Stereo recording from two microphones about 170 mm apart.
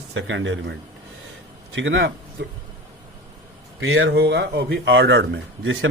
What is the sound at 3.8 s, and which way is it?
Speech, 85° right.